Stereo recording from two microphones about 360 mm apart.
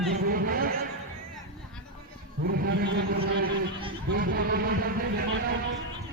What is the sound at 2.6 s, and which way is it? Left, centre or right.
Speech, right.